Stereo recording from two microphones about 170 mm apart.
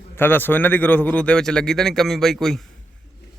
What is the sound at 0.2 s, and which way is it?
A man's voice, 10° left (ahead or behind).